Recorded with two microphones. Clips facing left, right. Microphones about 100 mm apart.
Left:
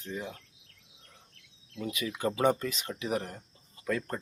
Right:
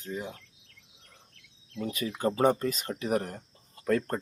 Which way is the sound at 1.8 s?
40° right (ahead or behind).